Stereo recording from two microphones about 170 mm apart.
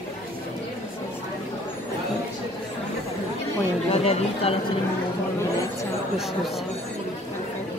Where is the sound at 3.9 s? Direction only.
40° left (ahead or behind).